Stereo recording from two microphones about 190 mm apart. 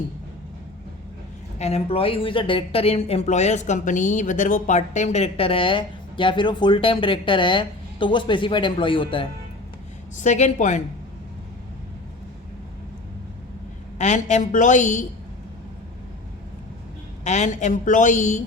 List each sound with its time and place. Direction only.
1.5 s speech: 35° left (ahead or behind)
10.2 s a woman's voice: 40° left (ahead or behind)
14.0 s a woman's voice: 40° left (ahead or behind)
17.2 s a woman's voice: 40° left (ahead or behind)